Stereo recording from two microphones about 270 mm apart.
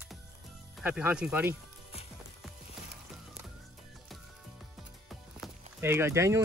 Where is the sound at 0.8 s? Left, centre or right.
Centre.